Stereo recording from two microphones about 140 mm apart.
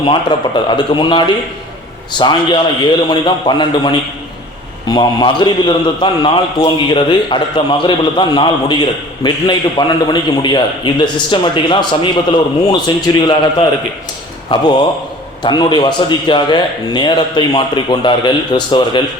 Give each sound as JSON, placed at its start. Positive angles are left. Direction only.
{"t": 0.0, "sound": "a man's voice", "side_deg": 35}